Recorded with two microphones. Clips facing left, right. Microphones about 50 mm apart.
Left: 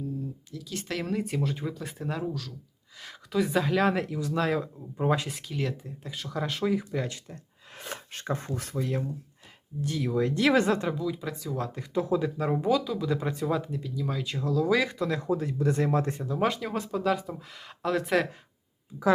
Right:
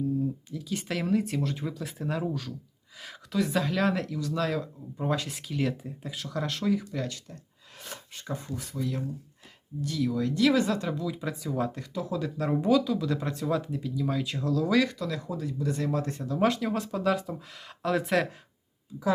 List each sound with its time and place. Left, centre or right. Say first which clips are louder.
0.5 s speech: right 2 dB; centre
3.3 s speech: left 2 dB; centre
5.3 s speech: right 2 dB; centre; by 7.3 s left
7.8 s a sound: left 4 dB; left
8.1 s speech: left 3 dB; left
9.8 s speech: left 1 dB; left
11.0 s speech: left 1 dB; centre
11.9 s speech: left 6 dB; left
12.2 s speech: left 1 dB; centre
14.9 s speech: left 5 dB; left
16.1 s speech: even; centre
16.4 s speech: right 3 dB; centre